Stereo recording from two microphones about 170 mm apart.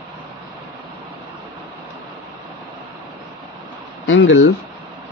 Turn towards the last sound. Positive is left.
turn(degrees=90)